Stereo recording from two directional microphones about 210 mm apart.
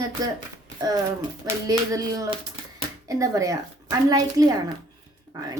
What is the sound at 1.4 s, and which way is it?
A woman's voice, 15° right (ahead or behind).